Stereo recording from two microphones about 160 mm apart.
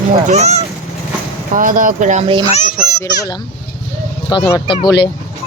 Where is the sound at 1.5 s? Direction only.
55° right (ahead or behind).